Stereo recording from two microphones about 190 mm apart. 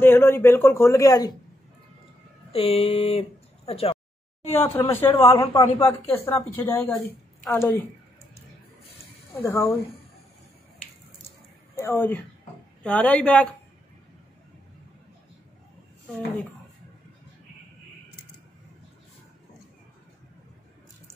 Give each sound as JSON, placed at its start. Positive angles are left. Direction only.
{"t": 0.0, "sound": "speech", "side_deg": 10}
{"t": 2.5, "sound": "speech", "side_deg": 30}
{"t": 4.5, "sound": "speech", "side_deg": 10}
{"t": 9.3, "sound": "speech", "side_deg": 15}
{"t": 11.7, "sound": "a woman's voice", "side_deg": 10}